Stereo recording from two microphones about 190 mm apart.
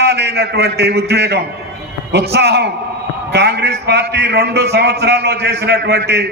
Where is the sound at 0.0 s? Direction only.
60° right (ahead or behind).